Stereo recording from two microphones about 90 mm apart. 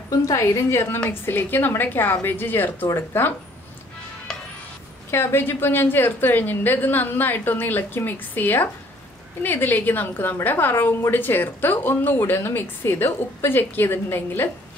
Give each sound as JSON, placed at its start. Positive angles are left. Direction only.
{"t": 0.3, "sound": "a woman's voice", "side_deg": 35}
{"t": 5.1, "sound": "a woman's voice", "side_deg": 25}